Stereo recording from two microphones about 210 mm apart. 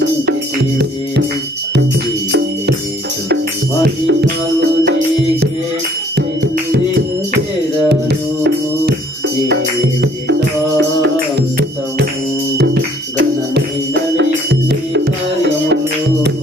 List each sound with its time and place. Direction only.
3.8 s music: 50° right (ahead or behind)
7.9 s music: 55° right (ahead or behind)